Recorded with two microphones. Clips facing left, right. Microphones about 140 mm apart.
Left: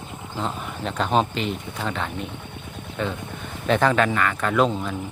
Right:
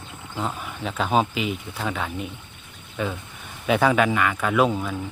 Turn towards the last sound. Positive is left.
turn(degrees=-5)  # may be behind; listen again after turning